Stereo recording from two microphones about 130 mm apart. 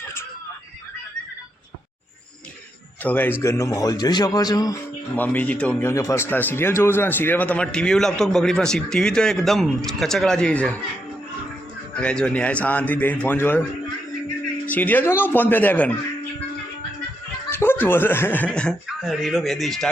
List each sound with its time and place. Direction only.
3.0 s a man's voice: 15° left (ahead or behind)
5.1 s a man's voice: 15° left (ahead or behind)
5.9 s a man's voice: 25° left (ahead or behind); by 10.8 s 10° left (ahead or behind)
11.9 s a man's voice: 10° left (ahead or behind)
14.7 s a man's voice: 15° left (ahead or behind)
17.5 s speech: 15° left (ahead or behind); by 19.9 s centre (ahead or behind)